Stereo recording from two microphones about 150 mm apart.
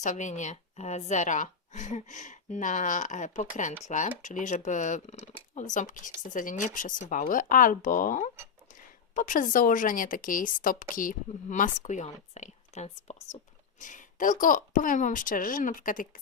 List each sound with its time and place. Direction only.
0.0 s a woman's voice: 55° left (ahead or behind)